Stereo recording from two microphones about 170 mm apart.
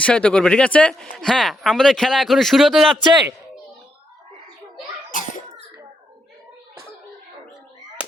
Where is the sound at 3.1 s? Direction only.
25° right (ahead or behind).